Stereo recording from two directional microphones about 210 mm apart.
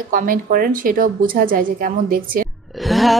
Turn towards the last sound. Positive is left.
turn(degrees=0)  # may be behind; listen again after turning